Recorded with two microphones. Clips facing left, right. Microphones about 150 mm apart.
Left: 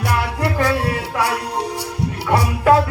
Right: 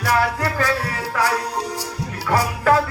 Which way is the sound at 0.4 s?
20° left (ahead or behind).